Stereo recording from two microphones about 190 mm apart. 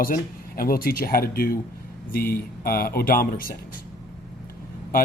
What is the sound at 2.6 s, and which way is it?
Speech, 50° left (ahead or behind).